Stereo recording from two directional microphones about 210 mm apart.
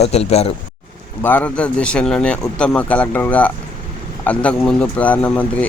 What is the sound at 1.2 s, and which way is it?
Speech, 10° left (ahead or behind).